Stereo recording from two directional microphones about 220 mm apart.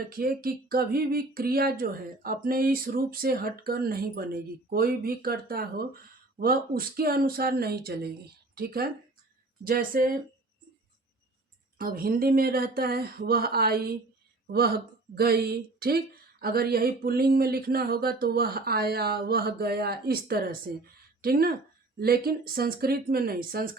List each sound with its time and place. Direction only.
0.1 s speech: 40° right (ahead or behind)
11.8 s a woman's voice: 40° right (ahead or behind)